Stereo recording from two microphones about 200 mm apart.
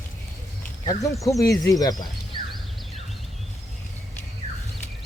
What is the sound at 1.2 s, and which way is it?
Speech, 15° left (ahead or behind).